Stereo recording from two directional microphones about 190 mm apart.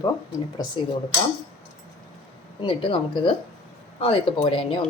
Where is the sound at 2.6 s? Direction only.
25° left (ahead or behind).